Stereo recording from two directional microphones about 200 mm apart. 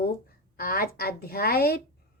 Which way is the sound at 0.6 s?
50° left (ahead or behind).